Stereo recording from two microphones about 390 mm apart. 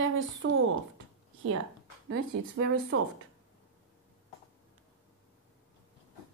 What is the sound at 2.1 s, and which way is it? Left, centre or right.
Speech, right.